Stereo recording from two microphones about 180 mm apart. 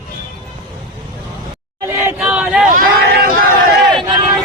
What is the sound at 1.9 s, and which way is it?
Chatter, 15° right (ahead or behind).